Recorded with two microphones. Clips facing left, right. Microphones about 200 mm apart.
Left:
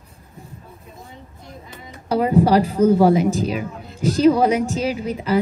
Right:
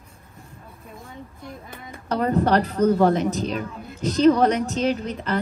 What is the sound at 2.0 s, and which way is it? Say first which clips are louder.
A child's voice: left 4 dB; 10° left (ahead or behind).